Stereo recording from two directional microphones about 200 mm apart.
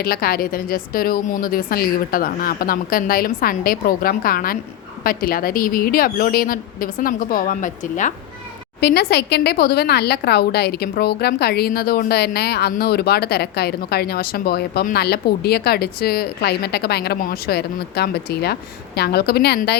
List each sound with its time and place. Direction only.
0.0 s speech: 50° left (ahead or behind)
8.8 s speech: 55° left (ahead or behind)